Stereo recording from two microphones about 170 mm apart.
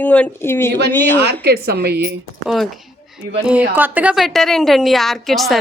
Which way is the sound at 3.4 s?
10° right (ahead or behind).